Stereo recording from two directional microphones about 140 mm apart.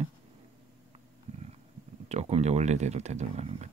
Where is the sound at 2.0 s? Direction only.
50° right (ahead or behind).